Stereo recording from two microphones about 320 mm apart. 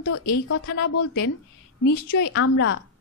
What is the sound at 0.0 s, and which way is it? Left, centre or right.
A woman's voice, left.